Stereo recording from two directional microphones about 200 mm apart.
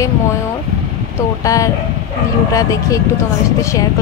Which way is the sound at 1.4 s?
15° left (ahead or behind).